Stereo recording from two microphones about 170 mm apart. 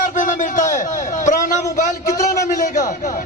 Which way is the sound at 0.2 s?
50° left (ahead or behind).